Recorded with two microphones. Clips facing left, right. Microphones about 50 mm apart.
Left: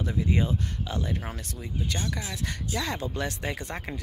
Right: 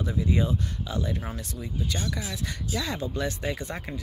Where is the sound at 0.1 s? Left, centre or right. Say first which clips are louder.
Right 1 dB; left.